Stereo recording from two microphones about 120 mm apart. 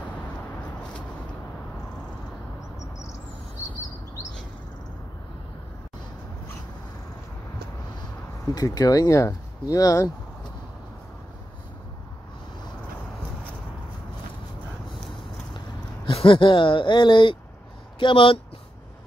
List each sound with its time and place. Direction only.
8.5 s speech: 30° left (ahead or behind)
16.1 s speech: 50° left (ahead or behind)